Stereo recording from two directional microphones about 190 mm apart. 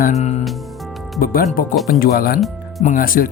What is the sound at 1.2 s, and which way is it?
Speech, 50° left (ahead or behind).